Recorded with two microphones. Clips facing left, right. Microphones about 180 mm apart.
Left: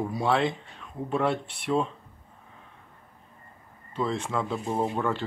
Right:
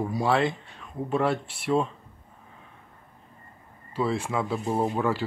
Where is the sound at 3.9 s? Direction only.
5° right (ahead or behind).